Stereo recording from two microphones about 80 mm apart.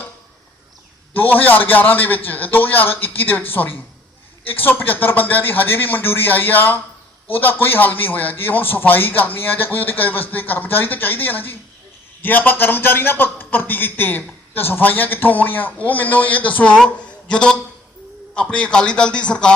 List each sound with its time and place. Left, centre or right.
1.1 s a man's voice: left